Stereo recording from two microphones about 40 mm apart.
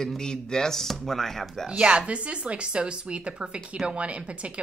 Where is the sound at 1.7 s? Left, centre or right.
Right.